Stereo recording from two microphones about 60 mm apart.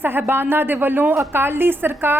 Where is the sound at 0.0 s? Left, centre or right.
Right.